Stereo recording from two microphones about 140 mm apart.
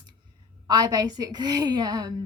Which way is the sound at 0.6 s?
30° right (ahead or behind).